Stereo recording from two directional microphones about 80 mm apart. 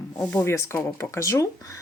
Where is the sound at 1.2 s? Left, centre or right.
Left.